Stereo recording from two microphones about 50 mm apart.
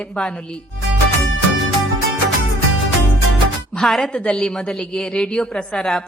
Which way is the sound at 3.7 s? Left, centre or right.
Centre.